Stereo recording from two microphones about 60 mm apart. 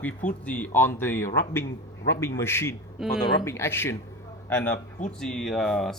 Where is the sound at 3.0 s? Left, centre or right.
Centre.